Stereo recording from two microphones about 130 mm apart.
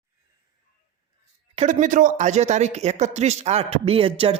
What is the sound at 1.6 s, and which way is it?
Speech, 85° right.